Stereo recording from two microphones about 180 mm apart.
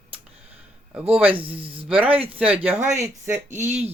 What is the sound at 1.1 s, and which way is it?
Speech, 10° right (ahead or behind).